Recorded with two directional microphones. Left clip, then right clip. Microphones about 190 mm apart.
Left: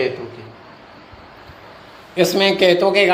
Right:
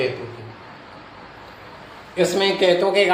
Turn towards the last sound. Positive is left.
turn(degrees=40)  # may be behind; listen again after turning